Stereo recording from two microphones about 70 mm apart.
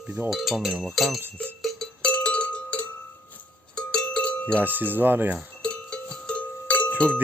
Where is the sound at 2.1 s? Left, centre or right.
Centre.